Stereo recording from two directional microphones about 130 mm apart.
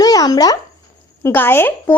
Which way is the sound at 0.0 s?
30° left (ahead or behind).